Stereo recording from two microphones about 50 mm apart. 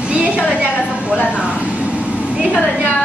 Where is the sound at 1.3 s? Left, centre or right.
Right.